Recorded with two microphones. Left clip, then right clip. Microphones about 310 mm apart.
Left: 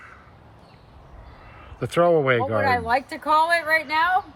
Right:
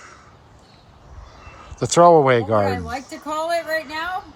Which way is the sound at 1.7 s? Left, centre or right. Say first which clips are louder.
Right 7 dB; centre.